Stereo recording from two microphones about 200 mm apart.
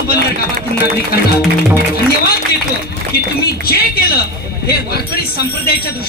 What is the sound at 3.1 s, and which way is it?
Speech, 50° left (ahead or behind).